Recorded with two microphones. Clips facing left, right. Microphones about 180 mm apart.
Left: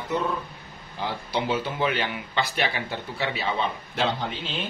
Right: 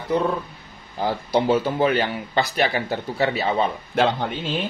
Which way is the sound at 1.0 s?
45° right (ahead or behind).